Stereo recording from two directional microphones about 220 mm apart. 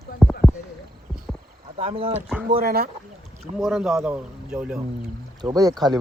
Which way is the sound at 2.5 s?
45° right (ahead or behind).